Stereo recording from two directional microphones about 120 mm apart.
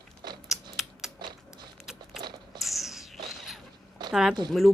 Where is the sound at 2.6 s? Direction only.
Centre (ahead or behind).